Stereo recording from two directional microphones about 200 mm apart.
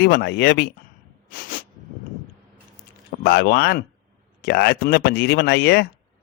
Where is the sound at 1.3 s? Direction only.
45° left (ahead or behind).